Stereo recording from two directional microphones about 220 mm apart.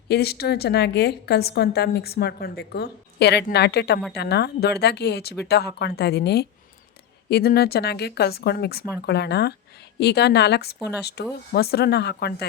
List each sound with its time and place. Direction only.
0.1 s a woman's voice: 45° left (ahead or behind)